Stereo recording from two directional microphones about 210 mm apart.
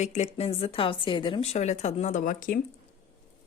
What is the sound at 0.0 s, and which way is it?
Speech, 35° left (ahead or behind).